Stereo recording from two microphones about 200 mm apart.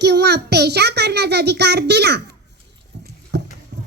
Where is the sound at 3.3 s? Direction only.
60° right (ahead or behind).